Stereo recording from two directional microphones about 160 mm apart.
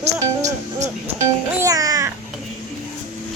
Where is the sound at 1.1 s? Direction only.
20° right (ahead or behind).